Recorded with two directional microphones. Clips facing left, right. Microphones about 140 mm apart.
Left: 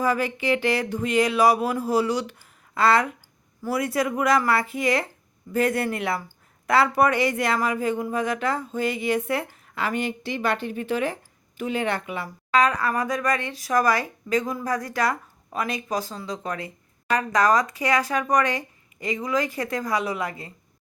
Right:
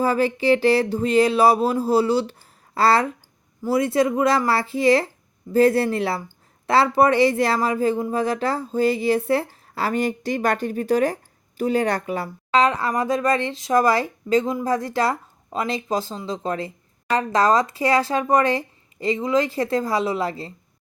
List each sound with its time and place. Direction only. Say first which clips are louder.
0.0 s speech: right 4 dB; 30° right (ahead or behind)
12.5 s speech: right 2 dB; 25° right (ahead or behind)